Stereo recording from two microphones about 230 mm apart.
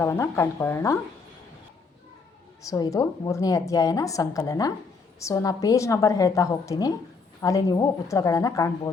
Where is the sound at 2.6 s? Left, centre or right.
Centre.